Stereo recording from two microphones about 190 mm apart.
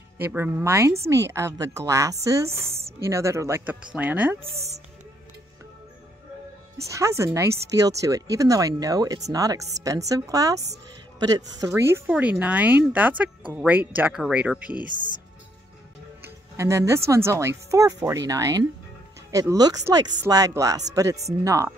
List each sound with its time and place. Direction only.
0.2 s speech: 10° right (ahead or behind)
6.9 s speech: 15° right (ahead or behind)
16.5 s speech: 15° right (ahead or behind)